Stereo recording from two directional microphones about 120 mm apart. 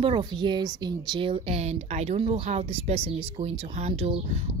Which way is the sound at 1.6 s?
65° right (ahead or behind).